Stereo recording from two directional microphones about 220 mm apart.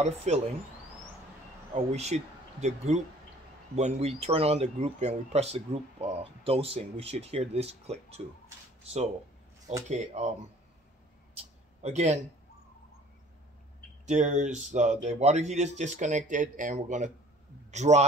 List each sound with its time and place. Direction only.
0.0 s speech: 30° right (ahead or behind)
1.7 s speech: 30° right (ahead or behind)
9.8 s speech: 30° right (ahead or behind)
11.8 s speech: 30° right (ahead or behind)
14.0 s a man's voice: 35° right (ahead or behind)